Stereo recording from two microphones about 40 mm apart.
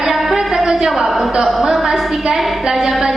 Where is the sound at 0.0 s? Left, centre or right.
Centre.